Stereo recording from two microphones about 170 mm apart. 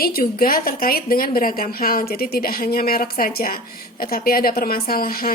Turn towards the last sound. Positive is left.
turn(degrees=60)  # may be behind; listen again after turning